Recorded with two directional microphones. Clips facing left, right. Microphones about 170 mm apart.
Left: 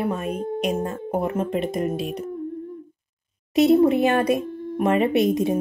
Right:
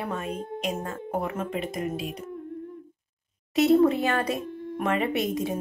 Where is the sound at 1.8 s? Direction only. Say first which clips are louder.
Left 5 dB; 60° left (ahead or behind).